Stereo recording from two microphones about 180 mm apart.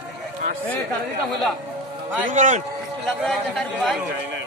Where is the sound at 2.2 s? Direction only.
45° right (ahead or behind).